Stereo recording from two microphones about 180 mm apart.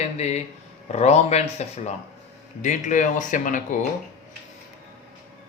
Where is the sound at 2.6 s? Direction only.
45° left (ahead or behind).